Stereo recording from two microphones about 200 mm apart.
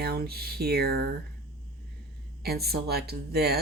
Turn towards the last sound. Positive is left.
turn(degrees=-50)  # may be behind; listen again after turning